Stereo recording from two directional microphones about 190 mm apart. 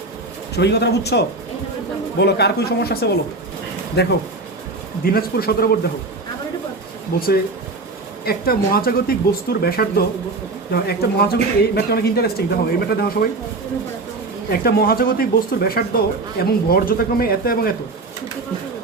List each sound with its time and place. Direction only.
0.5 s speech: 60° left (ahead or behind)
2.2 s speech: 60° left (ahead or behind)
7.1 s speech: 50° left (ahead or behind)
14.5 s speech: 55° left (ahead or behind)